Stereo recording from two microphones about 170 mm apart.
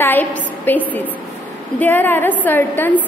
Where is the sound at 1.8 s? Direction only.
10° left (ahead or behind).